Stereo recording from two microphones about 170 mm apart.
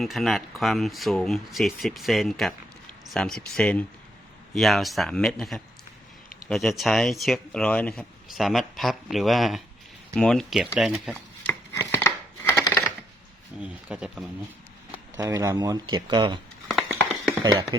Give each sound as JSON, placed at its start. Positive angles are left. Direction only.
{"t": 0.0, "sound": "speech", "side_deg": 0}
{"t": 11.1, "sound": "chopping", "side_deg": 15}
{"t": 13.6, "sound": "speech", "side_deg": -5}
{"t": 15.1, "sound": "speech", "side_deg": -20}
{"t": 16.6, "sound": "a sound", "side_deg": 0}
{"t": 17.4, "sound": "speech", "side_deg": -20}